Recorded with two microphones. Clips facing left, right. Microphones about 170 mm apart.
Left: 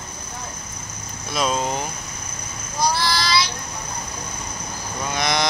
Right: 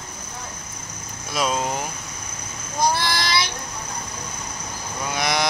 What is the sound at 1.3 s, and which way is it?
Speech, 5° right (ahead or behind).